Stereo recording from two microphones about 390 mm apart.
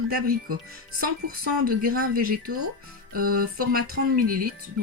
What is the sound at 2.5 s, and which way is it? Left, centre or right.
Speech, right.